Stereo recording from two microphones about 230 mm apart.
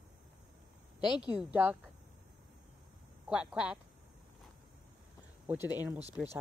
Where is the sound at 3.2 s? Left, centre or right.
Centre.